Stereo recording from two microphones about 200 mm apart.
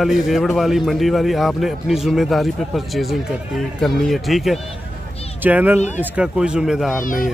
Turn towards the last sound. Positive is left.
turn(degrees=45)  # may be behind; listen again after turning